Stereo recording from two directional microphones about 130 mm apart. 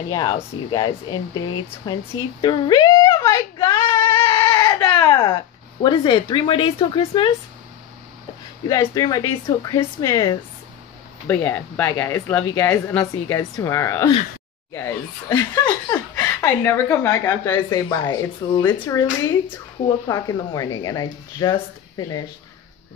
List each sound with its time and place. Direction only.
0.1 s speech: 35° left (ahead or behind)
2.4 s a sound: 35° left (ahead or behind)
4.1 s goat: 30° left (ahead or behind)
8.6 s a woman's voice: 25° left (ahead or behind)
11.2 s a woman's voice: 15° left (ahead or behind)
17.6 s speech: 35° left (ahead or behind)
20.1 s a woman's voice: 30° left (ahead or behind)